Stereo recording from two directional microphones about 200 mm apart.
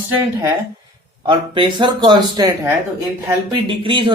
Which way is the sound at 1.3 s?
25° right (ahead or behind).